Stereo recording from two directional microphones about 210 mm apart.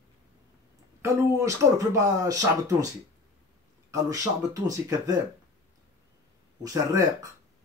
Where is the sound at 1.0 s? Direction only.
15° right (ahead or behind).